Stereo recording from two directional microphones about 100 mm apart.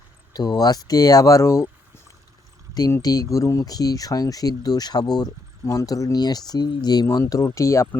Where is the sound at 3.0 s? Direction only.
40° left (ahead or behind).